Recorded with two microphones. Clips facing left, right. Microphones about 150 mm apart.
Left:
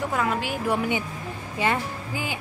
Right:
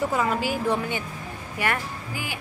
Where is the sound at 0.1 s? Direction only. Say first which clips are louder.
Right 1 dB; centre (ahead or behind).